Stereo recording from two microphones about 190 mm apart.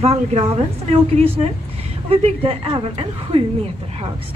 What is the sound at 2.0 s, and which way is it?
A woman's voice, 30° right (ahead or behind).